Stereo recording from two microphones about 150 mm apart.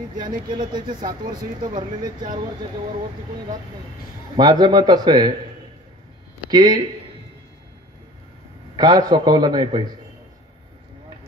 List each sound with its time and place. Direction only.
0.5 s speech: 30° right (ahead or behind)
4.4 s a man's voice: 30° right (ahead or behind)
6.5 s a man's voice: 25° right (ahead or behind)
8.7 s a man's voice: 25° right (ahead or behind)